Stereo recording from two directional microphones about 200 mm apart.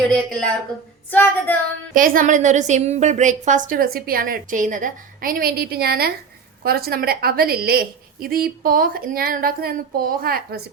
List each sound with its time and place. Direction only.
0.1 s speech: 5° left (ahead or behind)
1.1 s a sound: 10° left (ahead or behind)
1.9 s a woman's voice: 45° right (ahead or behind)